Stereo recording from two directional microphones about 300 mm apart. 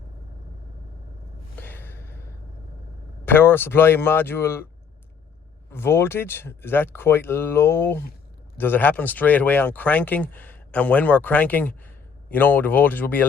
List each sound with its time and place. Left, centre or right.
1.5 s gasp: centre
3.2 s speech: centre
5.7 s speech: centre